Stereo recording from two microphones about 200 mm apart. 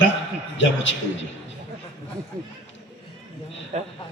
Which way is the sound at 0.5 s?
70° left (ahead or behind).